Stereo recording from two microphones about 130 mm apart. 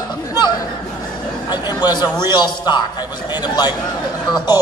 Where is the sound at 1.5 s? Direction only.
30° left (ahead or behind).